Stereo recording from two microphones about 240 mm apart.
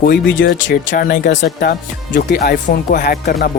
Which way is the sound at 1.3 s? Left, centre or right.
Left.